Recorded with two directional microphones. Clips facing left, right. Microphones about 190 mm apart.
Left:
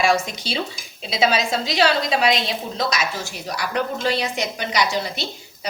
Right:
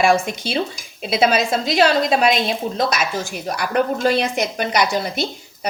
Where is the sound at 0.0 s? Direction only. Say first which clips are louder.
Right 3 dB; 50° right (ahead or behind).